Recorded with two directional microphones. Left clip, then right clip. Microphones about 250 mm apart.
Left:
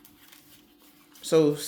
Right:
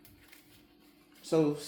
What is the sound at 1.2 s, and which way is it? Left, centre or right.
Speech, left.